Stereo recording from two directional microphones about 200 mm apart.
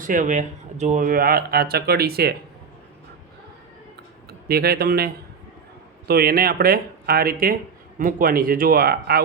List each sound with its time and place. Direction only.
0.0 s speech: 40° right (ahead or behind)
4.3 s a man's voice: 50° right (ahead or behind)